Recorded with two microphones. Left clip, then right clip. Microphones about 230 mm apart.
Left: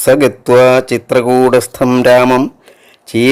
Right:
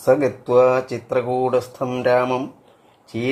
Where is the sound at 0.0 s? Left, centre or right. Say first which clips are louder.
Left 8 dB; left.